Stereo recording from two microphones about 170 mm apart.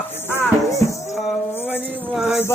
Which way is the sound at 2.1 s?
10° right (ahead or behind).